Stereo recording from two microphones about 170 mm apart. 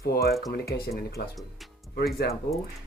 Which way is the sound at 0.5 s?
70° left (ahead or behind).